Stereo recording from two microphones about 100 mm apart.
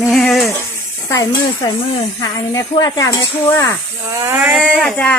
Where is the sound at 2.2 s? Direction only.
45° left (ahead or behind).